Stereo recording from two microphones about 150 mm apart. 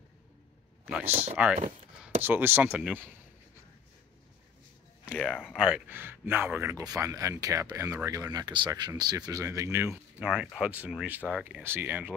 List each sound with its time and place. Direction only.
0.8 s speech: 10° right (ahead or behind)
5.0 s a sound: 5° right (ahead or behind)
5.3 s speech: 5° left (ahead or behind)
5.6 s speech: 10° right (ahead or behind)
10.3 s speech: 5° right (ahead or behind)